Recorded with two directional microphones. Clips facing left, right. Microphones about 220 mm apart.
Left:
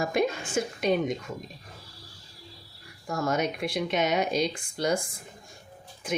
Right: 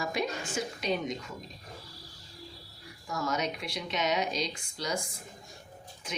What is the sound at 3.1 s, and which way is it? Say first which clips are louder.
Speech: left 5 dB; 50° left (ahead or behind).